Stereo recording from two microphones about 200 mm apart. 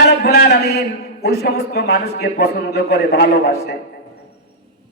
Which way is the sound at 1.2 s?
55° left (ahead or behind).